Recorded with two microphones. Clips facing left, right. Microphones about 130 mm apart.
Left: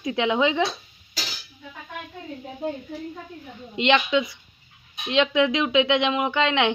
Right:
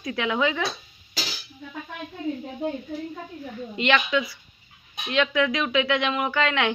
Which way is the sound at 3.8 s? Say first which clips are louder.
Left 3 dB; 20° left (ahead or behind).